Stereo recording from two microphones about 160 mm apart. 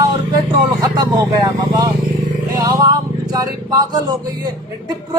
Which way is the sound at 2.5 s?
20° right (ahead or behind).